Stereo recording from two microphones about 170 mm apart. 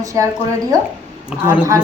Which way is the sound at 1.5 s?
20° right (ahead or behind).